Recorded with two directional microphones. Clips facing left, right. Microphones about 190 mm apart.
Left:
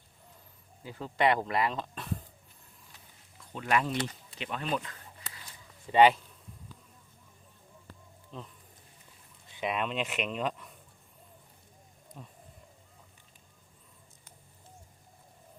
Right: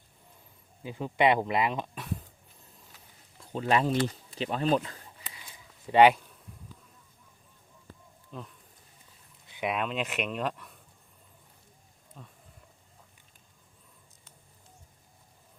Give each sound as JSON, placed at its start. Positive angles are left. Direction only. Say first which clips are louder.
{"t": 0.8, "sound": "speech", "louder": "right 3 dB", "side_deg": -20}
{"t": 3.5, "sound": "speech", "louder": "right 4 dB", "side_deg": -30}
{"t": 5.9, "sound": "speech", "louder": "right 2 dB", "side_deg": -10}
{"t": 8.3, "sound": "speech", "louder": "right 2 dB", "side_deg": -5}
{"t": 9.6, "sound": "speech", "louder": "right 1 dB", "side_deg": -5}
{"t": 12.1, "sound": "speech", "louder": "left 2 dB", "side_deg": 5}